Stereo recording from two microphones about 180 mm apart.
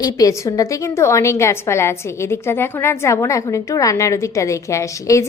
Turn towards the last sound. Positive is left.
turn(degrees=15)  # may be behind; listen again after turning